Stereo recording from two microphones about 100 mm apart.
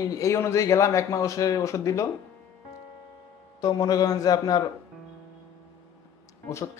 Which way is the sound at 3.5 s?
40° left (ahead or behind).